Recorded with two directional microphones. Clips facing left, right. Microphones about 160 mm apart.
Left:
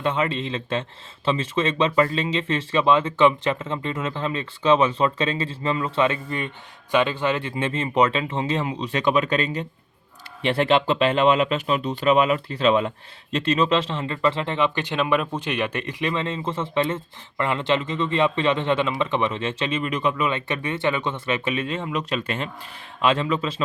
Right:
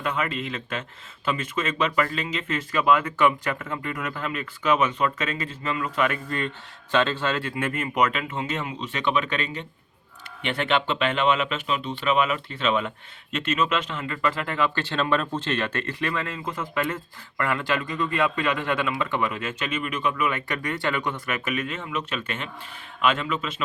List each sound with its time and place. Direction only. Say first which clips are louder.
0.0 s speech: left 4 dB; 30° left (ahead or behind)